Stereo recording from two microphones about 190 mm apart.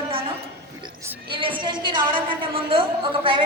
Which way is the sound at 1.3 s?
25° right (ahead or behind).